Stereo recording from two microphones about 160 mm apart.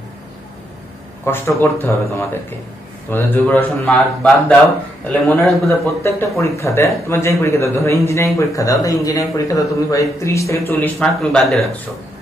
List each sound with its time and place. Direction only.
1.2 s a man's voice: 15° left (ahead or behind)
6.4 s a man's voice: 20° left (ahead or behind)
11.1 s a man's voice: centre (ahead or behind)